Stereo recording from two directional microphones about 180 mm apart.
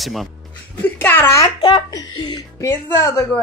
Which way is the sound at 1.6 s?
25° left (ahead or behind).